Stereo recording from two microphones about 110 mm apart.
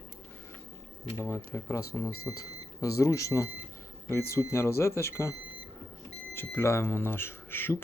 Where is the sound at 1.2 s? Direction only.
15° left (ahead or behind).